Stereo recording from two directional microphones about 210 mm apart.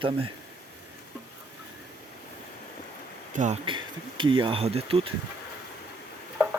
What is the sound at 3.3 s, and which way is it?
Speech, 35° right (ahead or behind).